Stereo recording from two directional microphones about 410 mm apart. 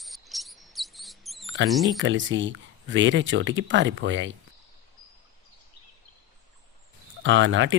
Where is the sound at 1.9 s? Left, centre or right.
Right.